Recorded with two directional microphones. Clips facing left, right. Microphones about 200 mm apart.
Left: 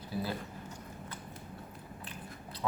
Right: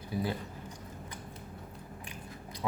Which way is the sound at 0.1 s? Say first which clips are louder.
Right 3 dB; 15° right (ahead or behind).